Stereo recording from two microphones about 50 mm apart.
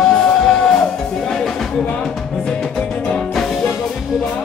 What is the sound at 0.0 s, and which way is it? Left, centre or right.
Music, centre.